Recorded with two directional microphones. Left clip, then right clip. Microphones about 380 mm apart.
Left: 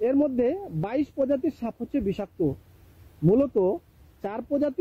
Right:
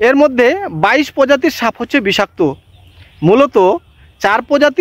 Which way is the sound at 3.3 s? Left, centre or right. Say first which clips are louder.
Right 13 dB; centre.